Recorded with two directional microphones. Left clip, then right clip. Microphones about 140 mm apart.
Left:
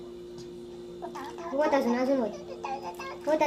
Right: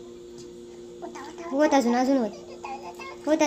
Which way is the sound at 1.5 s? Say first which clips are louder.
Right 4 dB; 60° right (ahead or behind).